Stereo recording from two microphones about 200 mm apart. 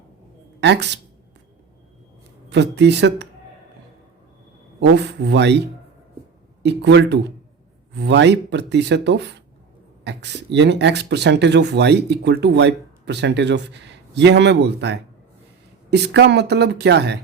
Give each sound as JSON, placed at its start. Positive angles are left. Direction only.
{"t": 0.6, "sound": "speech", "side_deg": -60}
{"t": 2.5, "sound": "speech", "side_deg": -60}
{"t": 4.8, "sound": "speech", "side_deg": -60}